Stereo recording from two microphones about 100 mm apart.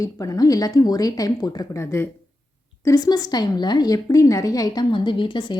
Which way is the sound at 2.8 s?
40° left (ahead or behind).